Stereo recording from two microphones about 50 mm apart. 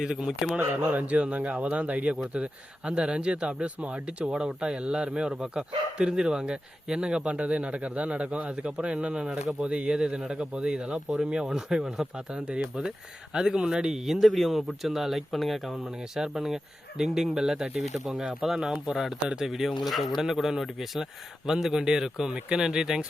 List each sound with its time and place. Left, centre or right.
0.0 s a man's voice: centre
0.8 s a man's voice: right